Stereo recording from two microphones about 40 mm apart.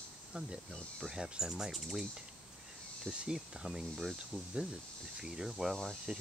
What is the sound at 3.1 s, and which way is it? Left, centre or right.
Speech, centre.